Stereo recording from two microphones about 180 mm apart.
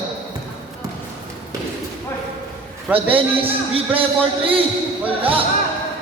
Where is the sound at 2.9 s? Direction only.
30° right (ahead or behind).